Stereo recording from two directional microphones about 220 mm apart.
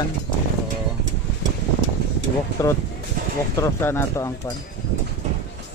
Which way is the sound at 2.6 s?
15° left (ahead or behind).